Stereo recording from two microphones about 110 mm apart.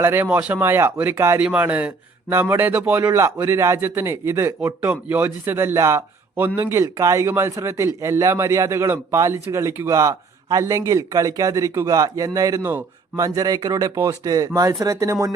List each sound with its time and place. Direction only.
0.0 s a man's voice: 20° right (ahead or behind)
0.3 s a man's voice: 10° right (ahead or behind)
1.4 s a man's voice: 10° right (ahead or behind); by 15.3 s 30° right (ahead or behind)